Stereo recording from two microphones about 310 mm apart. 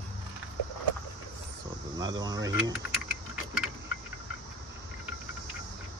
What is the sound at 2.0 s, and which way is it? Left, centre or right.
Speech, centre.